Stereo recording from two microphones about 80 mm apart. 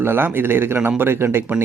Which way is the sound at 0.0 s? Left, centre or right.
Right.